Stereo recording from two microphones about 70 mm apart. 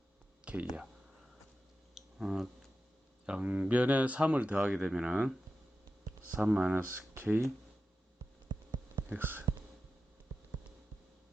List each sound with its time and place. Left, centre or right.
0.4 s a sound: right
2.0 s tick-tock: centre
3.2 s speech: centre
6.3 s speech: centre
7.2 s speech: right
9.0 s a sound: right